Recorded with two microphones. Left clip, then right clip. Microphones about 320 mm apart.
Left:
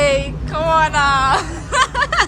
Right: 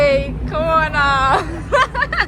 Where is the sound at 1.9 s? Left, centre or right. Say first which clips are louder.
Left 2 dB; centre.